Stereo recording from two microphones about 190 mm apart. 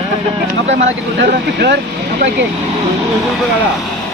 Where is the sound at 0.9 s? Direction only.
60° right (ahead or behind).